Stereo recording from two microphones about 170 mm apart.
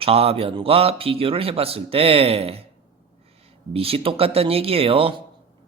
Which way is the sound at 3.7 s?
35° right (ahead or behind).